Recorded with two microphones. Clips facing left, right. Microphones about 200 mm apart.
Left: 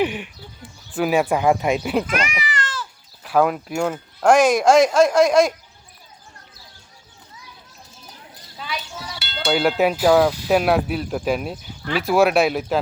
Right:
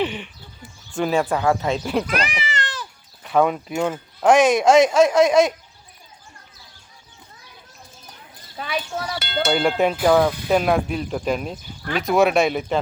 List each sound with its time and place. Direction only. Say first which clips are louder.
0.0 s speech: left 2 dB; 10° left (ahead or behind)
2.0 s cat: even; 35° right (ahead or behind)
3.2 s speech: even; 5° left (ahead or behind)
8.5 s speech: right 5 dB; 55° right (ahead or behind)
9.5 s speech: left 2 dB; 5° left (ahead or behind)